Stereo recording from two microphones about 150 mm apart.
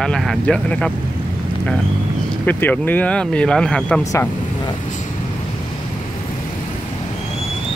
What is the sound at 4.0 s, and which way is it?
Speech, 20° left (ahead or behind).